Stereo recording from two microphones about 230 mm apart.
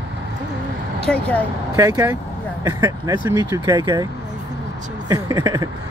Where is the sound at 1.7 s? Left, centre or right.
Centre.